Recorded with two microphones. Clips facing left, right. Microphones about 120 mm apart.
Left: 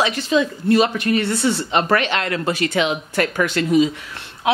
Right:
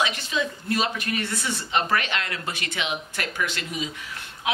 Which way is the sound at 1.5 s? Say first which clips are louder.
Left 4 dB; 65° left (ahead or behind).